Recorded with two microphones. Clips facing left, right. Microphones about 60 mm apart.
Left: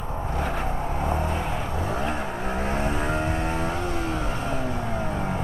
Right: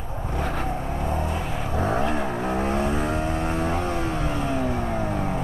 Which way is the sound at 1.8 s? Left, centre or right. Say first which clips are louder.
Right 7 dB; right.